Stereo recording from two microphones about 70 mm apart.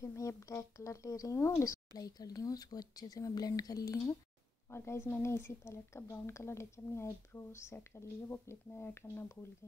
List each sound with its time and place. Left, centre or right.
0.0 s speech: left
2.0 s speech: left
4.6 s speech: left